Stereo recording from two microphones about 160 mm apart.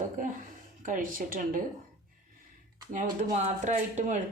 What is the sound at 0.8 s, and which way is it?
Speech, 55° right (ahead or behind).